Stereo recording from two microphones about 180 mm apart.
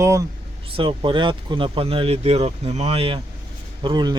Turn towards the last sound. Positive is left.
turn(degrees=-25)  # may be behind; listen again after turning